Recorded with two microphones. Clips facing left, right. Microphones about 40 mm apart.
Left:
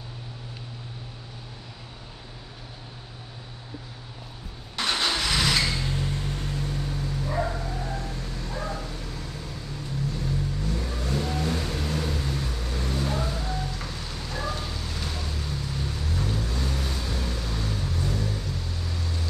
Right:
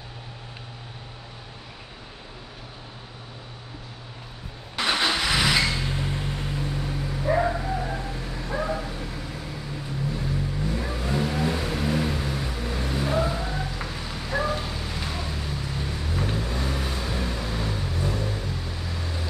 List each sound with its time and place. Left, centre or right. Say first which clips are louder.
4.7 s vehicle: right 2 dB; centre
7.2 s dog: right 8 dB; right
16.3 s vehicle: right 2 dB; right